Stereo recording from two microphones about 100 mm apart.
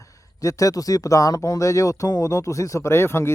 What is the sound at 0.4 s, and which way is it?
Speech, 35° left (ahead or behind).